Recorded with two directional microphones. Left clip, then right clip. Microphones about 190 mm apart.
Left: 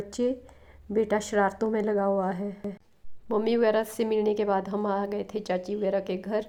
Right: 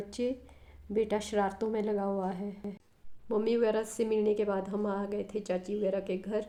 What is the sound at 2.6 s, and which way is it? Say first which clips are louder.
Speech: left 6 dB; centre (ahead or behind).